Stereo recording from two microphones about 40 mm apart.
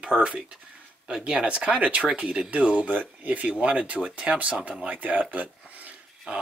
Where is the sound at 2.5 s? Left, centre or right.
Right.